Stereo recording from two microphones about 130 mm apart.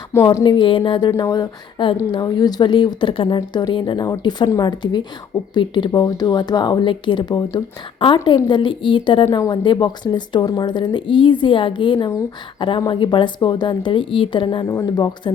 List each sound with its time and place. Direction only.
0.3 s a woman's voice: 35° left (ahead or behind)
14.7 s a woman's voice: 30° left (ahead or behind)